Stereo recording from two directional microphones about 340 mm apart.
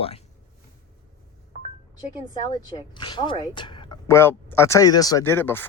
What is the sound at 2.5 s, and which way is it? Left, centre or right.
Speech, centre.